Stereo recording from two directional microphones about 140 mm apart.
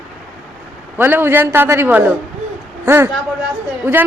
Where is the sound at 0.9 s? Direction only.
15° right (ahead or behind).